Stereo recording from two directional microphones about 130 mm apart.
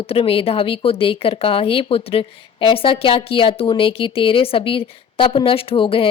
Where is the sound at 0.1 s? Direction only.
45° left (ahead or behind).